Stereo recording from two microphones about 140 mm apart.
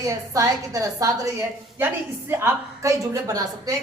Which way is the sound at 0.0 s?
25° right (ahead or behind).